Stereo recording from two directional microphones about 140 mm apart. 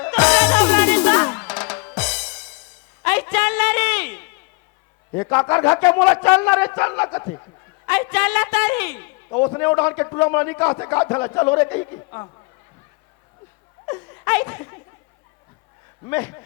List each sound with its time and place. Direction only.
0.0 s music: 10° left (ahead or behind)
3.0 s a sound: 15° left (ahead or behind)
5.1 s a man's voice: 15° left (ahead or behind)
7.9 s a man's voice: 10° left (ahead or behind)
11.9 s speech: 30° left (ahead or behind)
13.8 s laughter: 20° left (ahead or behind)
16.0 s a man's voice: 15° left (ahead or behind)